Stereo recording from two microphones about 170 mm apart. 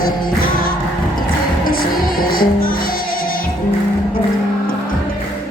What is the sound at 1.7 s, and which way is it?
Music, 60° left (ahead or behind).